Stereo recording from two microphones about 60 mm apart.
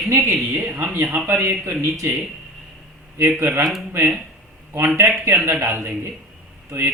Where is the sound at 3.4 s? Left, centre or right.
Right.